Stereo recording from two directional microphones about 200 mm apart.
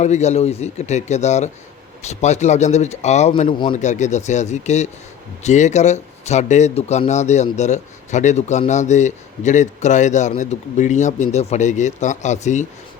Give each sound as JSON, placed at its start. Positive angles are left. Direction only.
{"t": 0.0, "sound": "a man's voice", "side_deg": 35}